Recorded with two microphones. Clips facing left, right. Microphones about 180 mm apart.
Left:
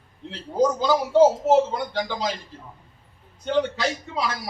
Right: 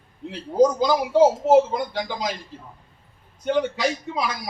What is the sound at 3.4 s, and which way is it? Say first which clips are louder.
Speech: right 1 dB; 10° right (ahead or behind).